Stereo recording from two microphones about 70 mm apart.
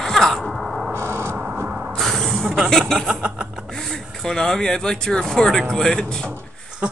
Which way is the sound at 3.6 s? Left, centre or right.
Centre.